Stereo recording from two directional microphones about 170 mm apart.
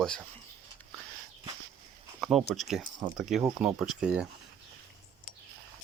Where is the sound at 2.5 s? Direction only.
Centre (ahead or behind).